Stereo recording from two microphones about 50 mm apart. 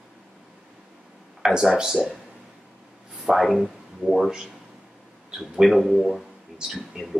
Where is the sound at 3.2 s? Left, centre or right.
Centre.